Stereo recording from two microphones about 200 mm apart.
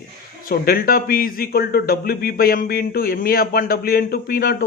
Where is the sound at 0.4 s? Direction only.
50° left (ahead or behind).